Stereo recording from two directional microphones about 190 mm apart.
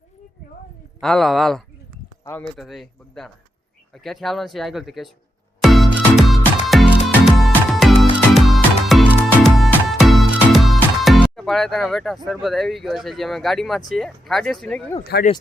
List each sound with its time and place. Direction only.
0.9 s speech: centre (ahead or behind)
5.6 s music: centre (ahead or behind)
15.1 s speech: 60° left (ahead or behind)